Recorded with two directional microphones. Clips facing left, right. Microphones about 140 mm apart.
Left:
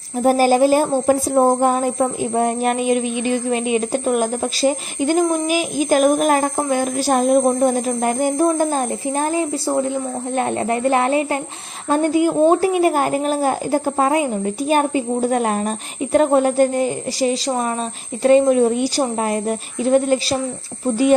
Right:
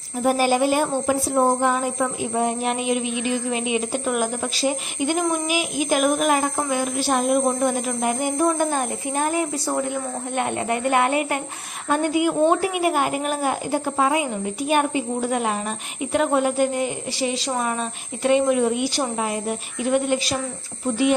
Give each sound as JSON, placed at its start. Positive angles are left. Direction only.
{"t": 0.2, "sound": "speech", "side_deg": 40}